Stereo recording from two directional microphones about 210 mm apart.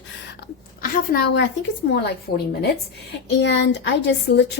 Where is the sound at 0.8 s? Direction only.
50° left (ahead or behind).